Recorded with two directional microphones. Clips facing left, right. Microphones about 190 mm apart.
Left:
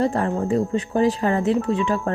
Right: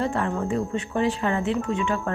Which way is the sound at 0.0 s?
40° left (ahead or behind).